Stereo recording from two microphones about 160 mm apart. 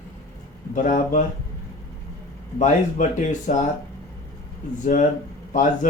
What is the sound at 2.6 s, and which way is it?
Speech, 50° left (ahead or behind).